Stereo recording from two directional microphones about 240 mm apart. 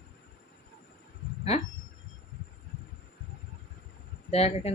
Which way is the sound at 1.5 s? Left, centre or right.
Left.